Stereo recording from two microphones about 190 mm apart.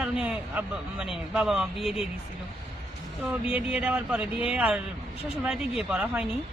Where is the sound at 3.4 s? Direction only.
5° right (ahead or behind).